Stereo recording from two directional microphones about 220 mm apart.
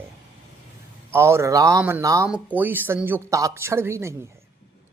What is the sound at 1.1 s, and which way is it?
Speech, 10° right (ahead or behind).